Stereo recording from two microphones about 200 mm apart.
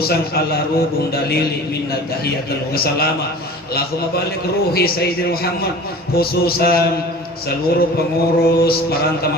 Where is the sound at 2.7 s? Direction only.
50° left (ahead or behind).